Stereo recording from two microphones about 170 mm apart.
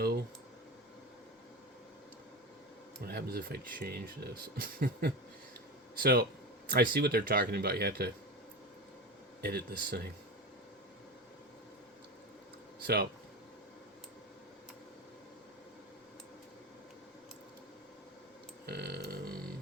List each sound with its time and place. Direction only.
3.1 s speech: 65° right (ahead or behind)
9.4 s speech: 70° right (ahead or behind)
12.8 s speech: 65° right (ahead or behind)
18.6 s burping: 75° right (ahead or behind)